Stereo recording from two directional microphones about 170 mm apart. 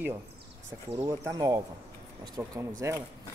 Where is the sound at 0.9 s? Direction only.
25° right (ahead or behind).